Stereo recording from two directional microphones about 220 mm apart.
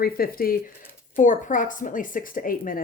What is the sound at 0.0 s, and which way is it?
A woman's voice, 40° left (ahead or behind).